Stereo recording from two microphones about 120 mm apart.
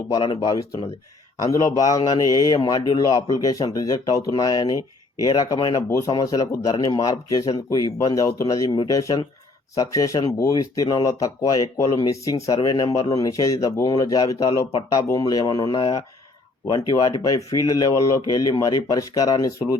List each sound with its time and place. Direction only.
0.1 s a man's voice: 40° left (ahead or behind)